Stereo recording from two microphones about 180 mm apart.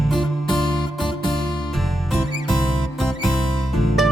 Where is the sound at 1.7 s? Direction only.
Centre (ahead or behind).